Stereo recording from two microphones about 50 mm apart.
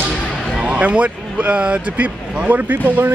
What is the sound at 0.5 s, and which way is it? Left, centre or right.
Speech, right.